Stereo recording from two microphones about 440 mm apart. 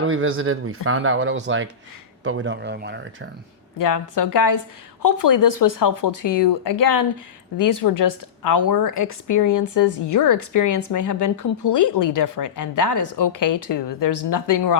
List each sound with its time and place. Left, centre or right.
0.0 s speech: right
3.8 s a woman's voice: left
6.2 s speech: left
7.5 s a woman's voice: left